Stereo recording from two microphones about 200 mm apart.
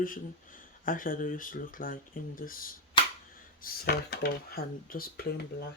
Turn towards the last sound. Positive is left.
turn(degrees=50)  # may be behind; listen again after turning